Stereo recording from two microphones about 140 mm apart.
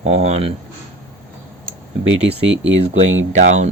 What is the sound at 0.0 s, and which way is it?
Speech, 50° right (ahead or behind).